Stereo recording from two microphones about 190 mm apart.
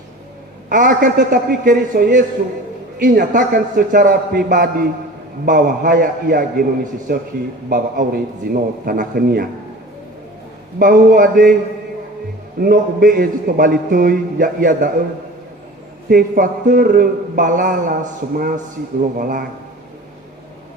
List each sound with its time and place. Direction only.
0.7 s a man's voice: 45° right (ahead or behind)
10.8 s a man's voice: 45° right (ahead or behind)
12.5 s a man's voice: 50° right (ahead or behind)
16.0 s a man's voice: 50° right (ahead or behind)